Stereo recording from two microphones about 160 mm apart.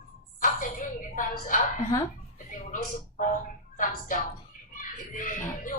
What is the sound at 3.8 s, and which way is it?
Speech, 55° left (ahead or behind).